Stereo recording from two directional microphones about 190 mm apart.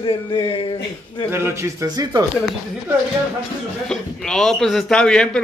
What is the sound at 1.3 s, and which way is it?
Speech, 15° right (ahead or behind).